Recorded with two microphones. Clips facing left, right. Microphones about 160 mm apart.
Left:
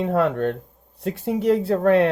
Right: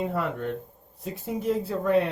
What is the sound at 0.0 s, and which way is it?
Speech, 85° left.